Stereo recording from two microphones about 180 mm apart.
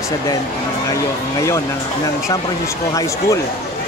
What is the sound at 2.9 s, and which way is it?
Speech, 20° left (ahead or behind).